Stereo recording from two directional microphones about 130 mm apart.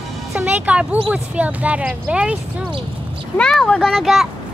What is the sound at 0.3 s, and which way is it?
Speech, 10° right (ahead or behind).